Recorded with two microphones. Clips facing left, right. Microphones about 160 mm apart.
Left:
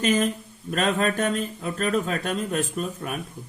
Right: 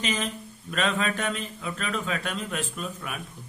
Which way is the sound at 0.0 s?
45° left (ahead or behind).